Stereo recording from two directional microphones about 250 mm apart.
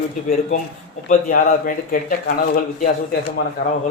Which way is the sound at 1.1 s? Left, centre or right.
Left.